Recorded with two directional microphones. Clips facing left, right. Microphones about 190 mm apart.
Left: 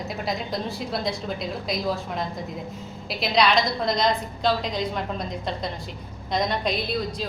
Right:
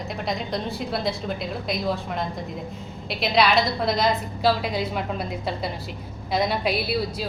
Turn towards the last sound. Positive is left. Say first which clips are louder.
# right 2 dB
turn(degrees=-10)  # may be behind; listen again after turning